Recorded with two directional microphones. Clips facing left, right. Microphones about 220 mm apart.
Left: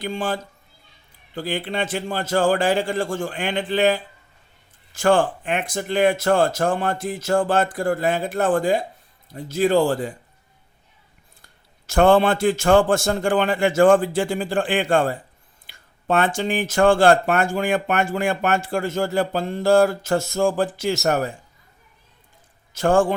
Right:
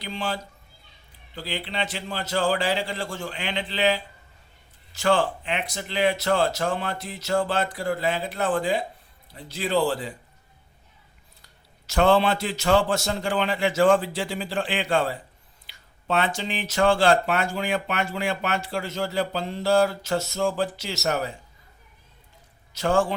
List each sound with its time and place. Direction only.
0.0 s speech: 50° left (ahead or behind)
1.4 s speech: 50° left (ahead or behind)
11.4 s speech: 50° left (ahead or behind)
22.7 s speech: 50° left (ahead or behind)